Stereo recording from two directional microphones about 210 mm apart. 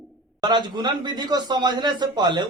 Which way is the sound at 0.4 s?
20° right (ahead or behind).